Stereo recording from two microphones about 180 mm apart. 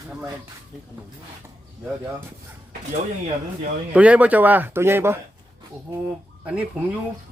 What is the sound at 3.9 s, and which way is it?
Speech, 5° right (ahead or behind).